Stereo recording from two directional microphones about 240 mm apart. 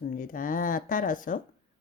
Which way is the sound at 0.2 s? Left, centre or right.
Left.